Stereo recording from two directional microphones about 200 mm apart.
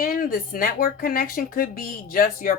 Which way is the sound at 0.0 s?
45° left (ahead or behind).